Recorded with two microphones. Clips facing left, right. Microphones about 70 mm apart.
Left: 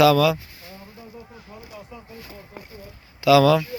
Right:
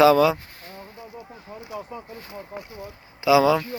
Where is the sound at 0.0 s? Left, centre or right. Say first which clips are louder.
Right 1 dB; right.